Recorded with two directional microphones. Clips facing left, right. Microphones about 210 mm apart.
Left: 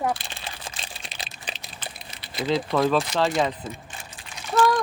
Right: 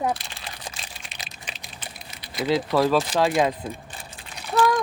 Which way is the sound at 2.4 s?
5° right (ahead or behind).